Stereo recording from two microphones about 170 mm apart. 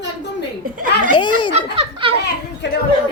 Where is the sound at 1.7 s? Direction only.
30° right (ahead or behind).